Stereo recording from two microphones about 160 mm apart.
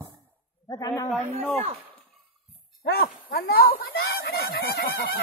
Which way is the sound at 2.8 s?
75° left (ahead or behind).